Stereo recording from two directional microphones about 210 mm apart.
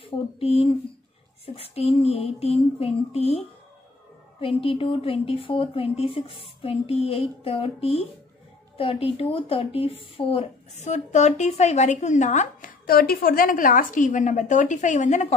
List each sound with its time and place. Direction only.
0.0 s speech: 25° left (ahead or behind)